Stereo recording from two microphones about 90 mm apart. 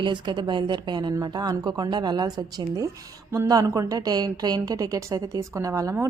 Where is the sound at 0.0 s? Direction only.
60° right (ahead or behind).